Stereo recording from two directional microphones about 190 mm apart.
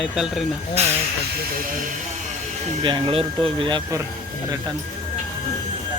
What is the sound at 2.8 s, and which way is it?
Speech, 25° right (ahead or behind).